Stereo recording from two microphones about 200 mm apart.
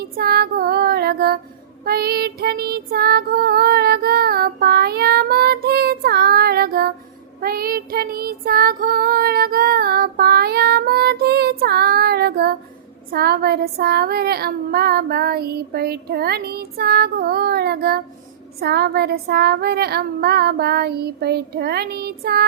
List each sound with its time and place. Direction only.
0.0 s child singing: 50° right (ahead or behind)